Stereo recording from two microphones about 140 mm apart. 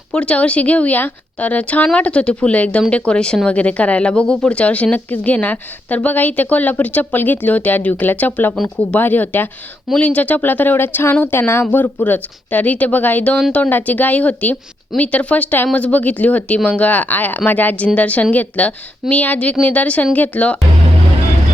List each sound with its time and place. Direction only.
0.1 s speech: 5° left (ahead or behind)